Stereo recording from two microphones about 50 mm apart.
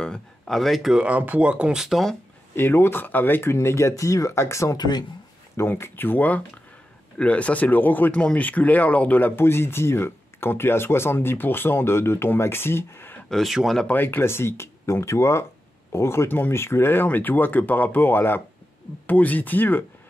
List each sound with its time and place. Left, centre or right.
0.0 s speech: centre
0.6 s speech: centre
0.9 s speech: right
2.5 s speech: left
3.4 s speech: left
5.7 s speech: left
8.1 s speech: left
9.3 s speech: left
13.3 s speech: centre
14.0 s speech: left
16.3 s speech: left
16.5 s speech: left
19.0 s speech: left